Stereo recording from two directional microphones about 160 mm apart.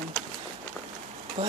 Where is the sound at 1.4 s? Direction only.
40° right (ahead or behind).